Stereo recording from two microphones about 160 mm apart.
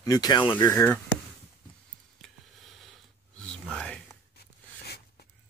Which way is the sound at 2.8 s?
5° left (ahead or behind).